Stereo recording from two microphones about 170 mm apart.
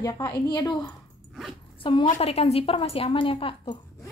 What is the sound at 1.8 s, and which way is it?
A woman's voice, 30° left (ahead or behind).